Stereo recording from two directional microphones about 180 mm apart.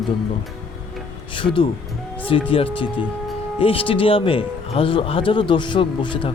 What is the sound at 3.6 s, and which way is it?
Speech, 30° left (ahead or behind).